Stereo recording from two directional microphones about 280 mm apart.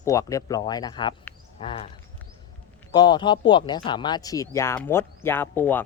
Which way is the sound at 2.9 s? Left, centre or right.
Centre.